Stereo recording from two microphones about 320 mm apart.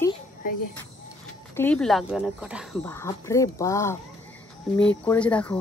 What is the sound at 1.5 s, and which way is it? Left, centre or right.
Speech, centre.